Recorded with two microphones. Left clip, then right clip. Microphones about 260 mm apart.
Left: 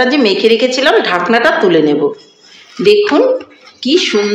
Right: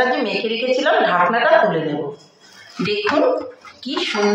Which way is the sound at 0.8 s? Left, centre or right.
Left.